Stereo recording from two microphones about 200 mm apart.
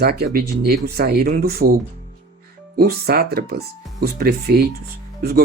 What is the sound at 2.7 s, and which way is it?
Speech, 50° right (ahead or behind).